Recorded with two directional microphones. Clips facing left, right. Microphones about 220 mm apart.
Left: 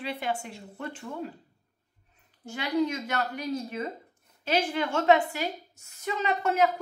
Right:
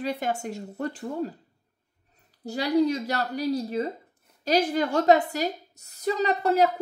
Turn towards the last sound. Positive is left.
turn(degrees=-35)  # may be behind; listen again after turning